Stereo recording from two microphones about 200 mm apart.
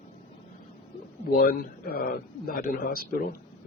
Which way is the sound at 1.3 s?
45° left (ahead or behind).